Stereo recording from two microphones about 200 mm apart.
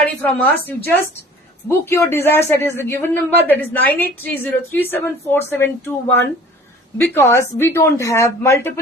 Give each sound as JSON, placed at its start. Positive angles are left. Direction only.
{"t": 0.2, "sound": "speech", "side_deg": 10}